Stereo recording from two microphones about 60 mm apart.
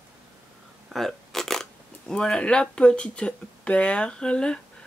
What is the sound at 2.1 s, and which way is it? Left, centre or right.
Speech, centre.